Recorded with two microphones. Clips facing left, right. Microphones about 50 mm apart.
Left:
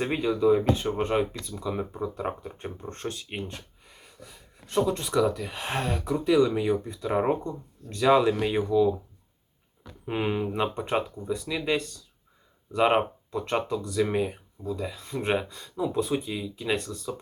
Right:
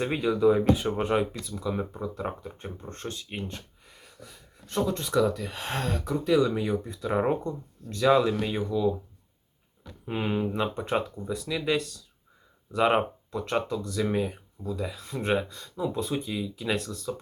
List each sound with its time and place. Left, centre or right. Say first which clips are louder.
0.0 s speech: right 1 dB; centre
3.0 s speech: left 3 dB; left
3.3 s a sound: left 1 dB; centre
5.1 s speech: right 1 dB; centre
10.1 s speech: left 1 dB; centre
16.0 s speech: left 5 dB; left
16.2 s speech: even; centre